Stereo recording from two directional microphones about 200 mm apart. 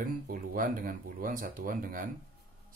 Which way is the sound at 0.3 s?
45° right (ahead or behind).